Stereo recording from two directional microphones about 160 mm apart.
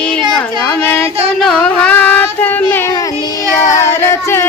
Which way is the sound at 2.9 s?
25° left (ahead or behind).